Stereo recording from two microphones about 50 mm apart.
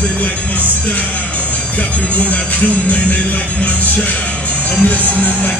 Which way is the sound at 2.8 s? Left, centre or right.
Left.